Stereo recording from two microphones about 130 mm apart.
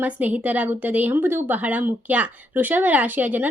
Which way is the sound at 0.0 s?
15° right (ahead or behind).